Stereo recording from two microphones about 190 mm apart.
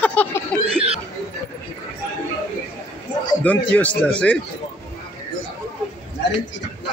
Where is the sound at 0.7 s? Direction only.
30° right (ahead or behind).